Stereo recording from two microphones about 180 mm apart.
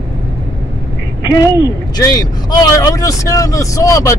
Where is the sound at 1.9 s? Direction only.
20° left (ahead or behind).